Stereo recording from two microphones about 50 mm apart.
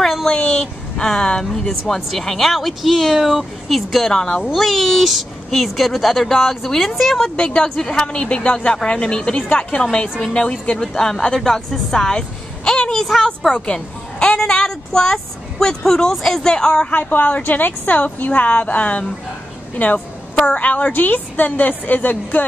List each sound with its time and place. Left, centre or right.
0.0 s a sound: centre
0.3 s speech: left; by 4.1 s centre
4.1 s speech: centre
7.3 s speech: centre
13.0 s speech: centre
13.5 s speech: centre
16.9 s speech: left
20.3 s speech: left